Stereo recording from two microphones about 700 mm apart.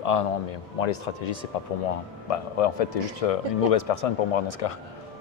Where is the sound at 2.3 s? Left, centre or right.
Left.